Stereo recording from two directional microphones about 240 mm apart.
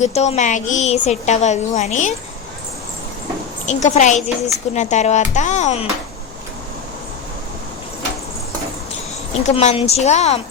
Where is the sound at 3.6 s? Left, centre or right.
Left.